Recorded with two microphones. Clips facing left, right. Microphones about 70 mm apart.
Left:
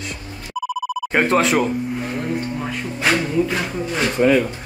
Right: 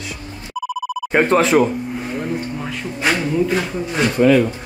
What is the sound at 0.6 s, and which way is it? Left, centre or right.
Telephone bell ringing, centre.